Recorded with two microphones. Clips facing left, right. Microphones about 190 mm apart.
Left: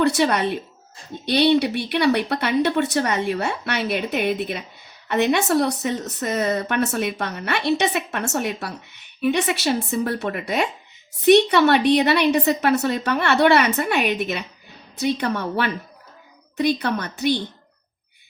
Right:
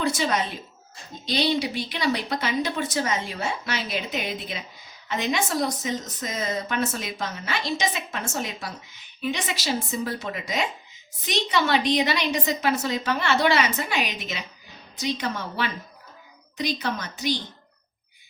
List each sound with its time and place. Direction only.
0.0 s speech: 65° left (ahead or behind)